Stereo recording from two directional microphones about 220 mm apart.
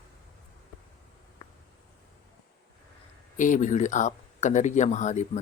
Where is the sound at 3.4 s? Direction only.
35° left (ahead or behind).